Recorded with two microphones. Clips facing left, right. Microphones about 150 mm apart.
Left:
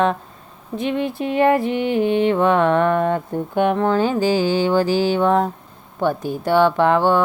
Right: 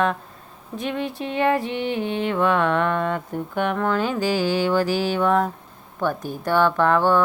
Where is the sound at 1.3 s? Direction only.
35° left (ahead or behind).